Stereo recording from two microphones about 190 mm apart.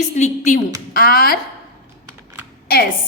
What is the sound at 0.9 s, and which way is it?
Speech, 50° left (ahead or behind).